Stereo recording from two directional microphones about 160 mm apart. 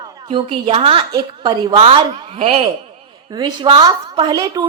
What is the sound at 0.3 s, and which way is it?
A woman's voice, 35° right (ahead or behind).